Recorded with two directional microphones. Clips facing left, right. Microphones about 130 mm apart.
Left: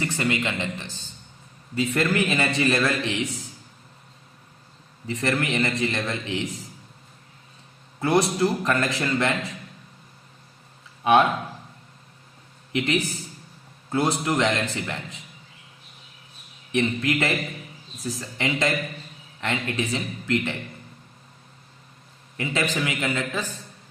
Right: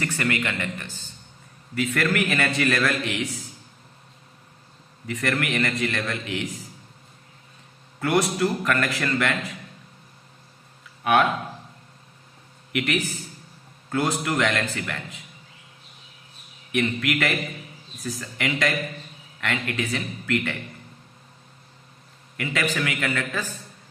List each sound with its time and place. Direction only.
0.0 s a man's voice: 20° left (ahead or behind)
5.0 s a man's voice: 25° left (ahead or behind)
8.0 s a man's voice: 25° left (ahead or behind)
11.0 s speech: 30° left (ahead or behind)
12.7 s a man's voice: 25° left (ahead or behind)
16.7 s a man's voice: 25° left (ahead or behind)
22.4 s a man's voice: 20° left (ahead or behind)